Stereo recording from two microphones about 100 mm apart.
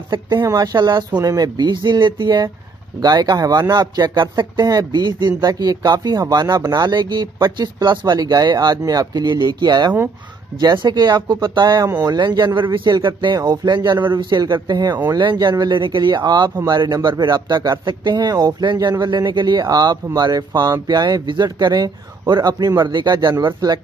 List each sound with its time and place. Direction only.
0.6 s speech: 45° right (ahead or behind)